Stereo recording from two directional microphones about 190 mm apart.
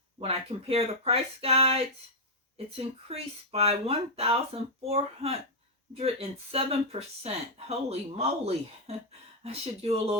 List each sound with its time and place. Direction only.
0.2 s speech: 30° right (ahead or behind)